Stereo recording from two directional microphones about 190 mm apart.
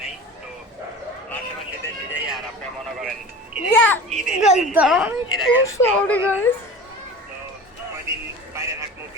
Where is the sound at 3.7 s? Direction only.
10° left (ahead or behind).